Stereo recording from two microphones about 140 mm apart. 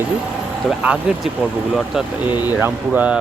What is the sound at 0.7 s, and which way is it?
Speech, 5° right (ahead or behind).